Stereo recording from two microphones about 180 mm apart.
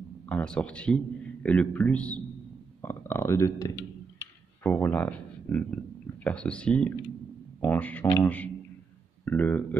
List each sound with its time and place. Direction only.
0.3 s a man's voice: 5° left (ahead or behind)
9.2 s speech: 10° left (ahead or behind)